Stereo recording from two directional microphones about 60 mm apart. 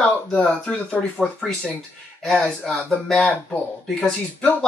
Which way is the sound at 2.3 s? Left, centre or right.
Centre.